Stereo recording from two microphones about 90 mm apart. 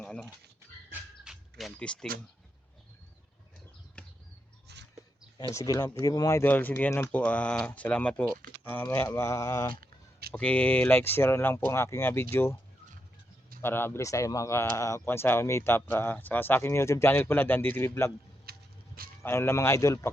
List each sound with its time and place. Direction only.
0.0 s a sound: 10° left (ahead or behind)
1.2 s a sound: 5° right (ahead or behind)
1.8 s speech: 10° left (ahead or behind)
5.5 s speech: 45° left (ahead or behind)
6.2 s speech: 25° left (ahead or behind)
8.7 s speech: 25° left (ahead or behind)
10.3 s speech: 15° left (ahead or behind)
13.6 s speech: 25° left (ahead or behind)
19.2 s speech: 30° left (ahead or behind)